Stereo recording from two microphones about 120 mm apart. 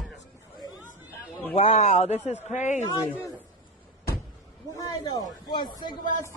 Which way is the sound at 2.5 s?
90° left.